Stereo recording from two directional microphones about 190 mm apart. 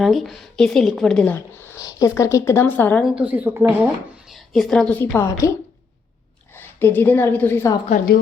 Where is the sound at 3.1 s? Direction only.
10° right (ahead or behind).